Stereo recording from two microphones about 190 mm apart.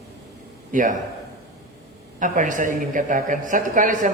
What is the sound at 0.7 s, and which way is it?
Speech, 45° right (ahead or behind).